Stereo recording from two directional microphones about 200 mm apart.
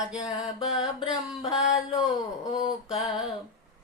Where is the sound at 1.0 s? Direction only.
25° left (ahead or behind).